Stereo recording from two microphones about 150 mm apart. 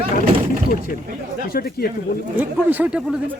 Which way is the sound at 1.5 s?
90° left.